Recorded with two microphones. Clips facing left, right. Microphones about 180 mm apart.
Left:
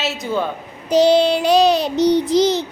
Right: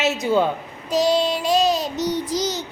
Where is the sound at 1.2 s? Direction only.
75° left (ahead or behind).